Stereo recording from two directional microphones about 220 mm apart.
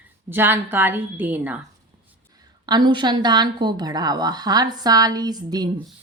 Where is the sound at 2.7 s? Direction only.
20° right (ahead or behind).